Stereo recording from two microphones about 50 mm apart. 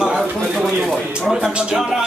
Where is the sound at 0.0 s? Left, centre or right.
Centre.